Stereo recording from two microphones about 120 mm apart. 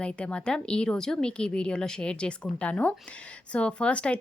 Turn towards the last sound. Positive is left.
turn(degrees=10)  # may be behind; listen again after turning